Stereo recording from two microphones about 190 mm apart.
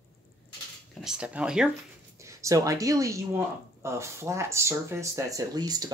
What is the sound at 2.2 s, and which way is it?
Speech, 15° right (ahead or behind).